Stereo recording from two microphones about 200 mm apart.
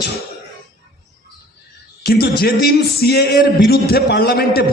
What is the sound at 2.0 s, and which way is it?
A man's voice, 50° left (ahead or behind).